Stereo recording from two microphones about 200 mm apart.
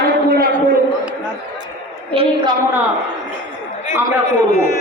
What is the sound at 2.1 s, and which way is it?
Speech, 25° right (ahead or behind).